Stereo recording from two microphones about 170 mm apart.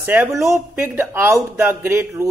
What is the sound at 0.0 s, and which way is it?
A woman's voice, 10° right (ahead or behind).